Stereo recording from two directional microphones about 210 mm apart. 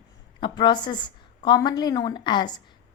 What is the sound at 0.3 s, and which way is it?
A woman's voice, 20° left (ahead or behind).